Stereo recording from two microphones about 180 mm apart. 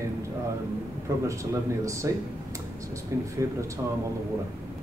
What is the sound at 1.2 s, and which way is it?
Speech, 15° right (ahead or behind).